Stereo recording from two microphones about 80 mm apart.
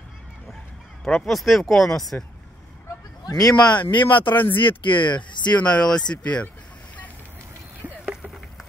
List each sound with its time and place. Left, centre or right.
1.0 s speech: centre
3.3 s speech: left
3.9 s speech: left
4.3 s speech: left
4.6 s speech: left
5.6 s speech: centre
8.0 s a sound: centre